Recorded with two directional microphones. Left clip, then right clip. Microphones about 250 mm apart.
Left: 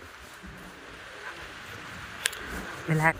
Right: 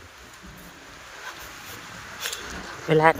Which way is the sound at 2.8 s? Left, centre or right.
Right.